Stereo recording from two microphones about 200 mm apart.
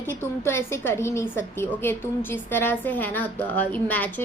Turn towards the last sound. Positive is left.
turn(degrees=10)  # may be behind; listen again after turning